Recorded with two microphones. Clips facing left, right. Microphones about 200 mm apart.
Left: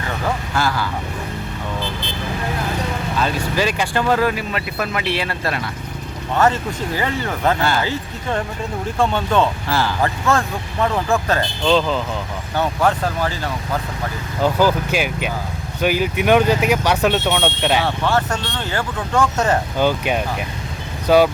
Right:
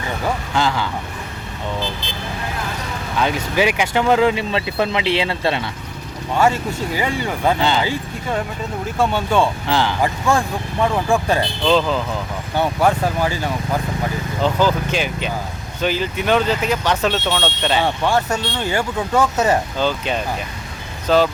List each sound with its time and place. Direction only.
0.5 s speech: 20° right (ahead or behind)
3.2 s speech: 15° right (ahead or behind)
6.3 s speech: 10° right (ahead or behind)
12.5 s speech: 15° right (ahead or behind)
14.4 s speech: 10° left (ahead or behind)
17.8 s speech: 15° right (ahead or behind)
19.8 s speech: 10° left (ahead or behind)